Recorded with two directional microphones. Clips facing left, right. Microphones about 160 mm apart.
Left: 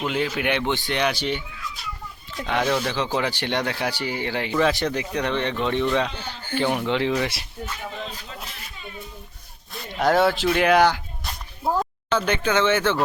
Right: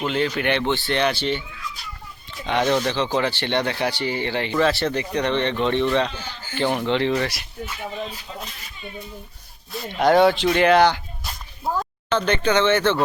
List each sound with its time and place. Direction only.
0.0 s speech: 5° left (ahead or behind)
2.5 s speech: 5° left (ahead or behind)
6.1 s speech: 60° left (ahead or behind)
6.6 s speech: 5° left (ahead or behind)
10.0 s speech: 5° left (ahead or behind)
12.1 s speech: 10° left (ahead or behind)